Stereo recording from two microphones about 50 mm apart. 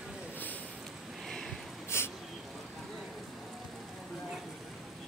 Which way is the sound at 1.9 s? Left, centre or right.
Left.